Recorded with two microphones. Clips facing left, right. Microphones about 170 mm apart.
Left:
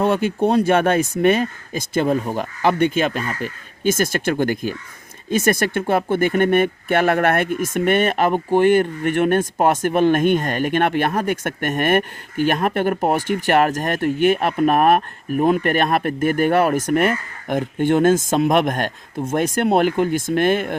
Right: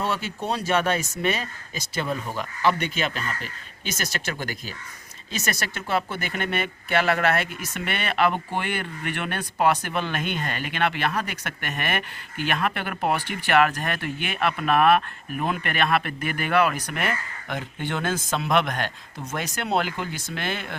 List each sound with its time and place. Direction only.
0.0 s speech: 55° left (ahead or behind)